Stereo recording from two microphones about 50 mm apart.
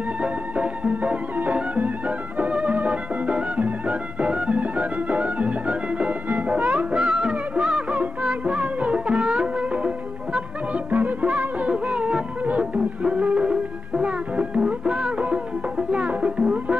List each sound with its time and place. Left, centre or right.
0.2 s music: right